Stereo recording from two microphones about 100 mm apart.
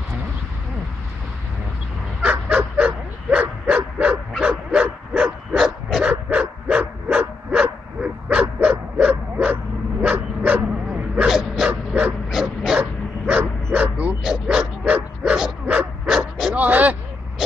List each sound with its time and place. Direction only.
2.2 s dog: 10° right (ahead or behind)
16.1 s dog: 5° right (ahead or behind)